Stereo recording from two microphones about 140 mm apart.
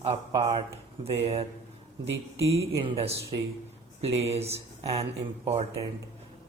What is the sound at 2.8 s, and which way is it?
Speech, 45° right (ahead or behind).